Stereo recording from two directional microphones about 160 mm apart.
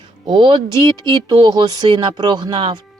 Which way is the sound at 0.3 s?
30° right (ahead or behind).